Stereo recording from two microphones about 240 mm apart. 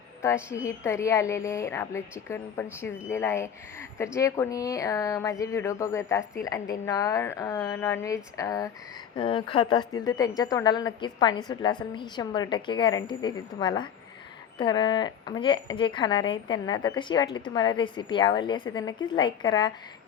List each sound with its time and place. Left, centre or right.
0.5 s a woman's voice: centre